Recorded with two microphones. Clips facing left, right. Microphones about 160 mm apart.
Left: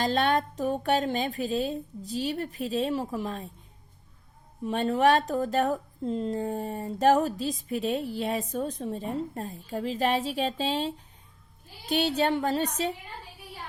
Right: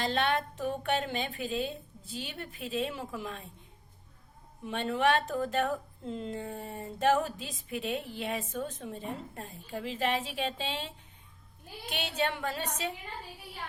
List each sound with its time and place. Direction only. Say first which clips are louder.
0.0 s a woman's voice: left 5 dB; 40° left (ahead or behind)
4.6 s a woman's voice: left 5 dB; 40° left (ahead or behind)